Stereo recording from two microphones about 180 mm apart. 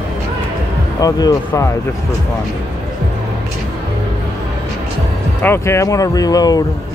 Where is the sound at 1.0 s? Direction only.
20° left (ahead or behind).